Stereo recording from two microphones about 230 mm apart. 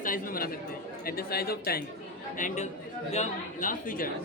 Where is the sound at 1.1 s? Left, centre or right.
Left.